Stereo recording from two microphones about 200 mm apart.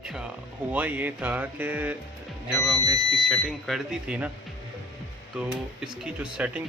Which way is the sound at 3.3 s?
Centre (ahead or behind).